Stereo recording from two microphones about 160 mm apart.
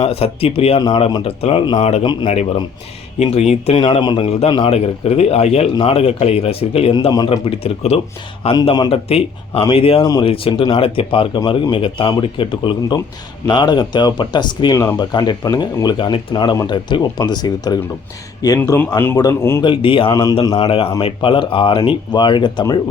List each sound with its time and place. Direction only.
0.0 s a man's voice: 40° left (ahead or behind)
0.8 s speech: 25° left (ahead or behind)
1.1 s a man's voice: 35° left (ahead or behind)
3.2 s a man's voice: 40° left (ahead or behind)
6.9 s speech: 25° left (ahead or behind)
7.8 s a man's voice: 40° left (ahead or behind)
8.4 s a man's voice: 30° left (ahead or behind)
10.0 s speech: 25° left (ahead or behind)
10.2 s a man's voice: 35° left (ahead or behind); by 19.6 s 15° left (ahead or behind)
19.6 s a man's voice: 35° left (ahead or behind)
20.6 s a man's voice: 40° left (ahead or behind)